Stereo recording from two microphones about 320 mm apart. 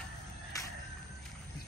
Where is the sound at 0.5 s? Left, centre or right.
Centre.